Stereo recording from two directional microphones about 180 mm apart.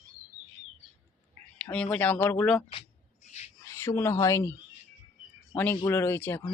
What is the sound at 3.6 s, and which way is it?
Speech, 15° left (ahead or behind).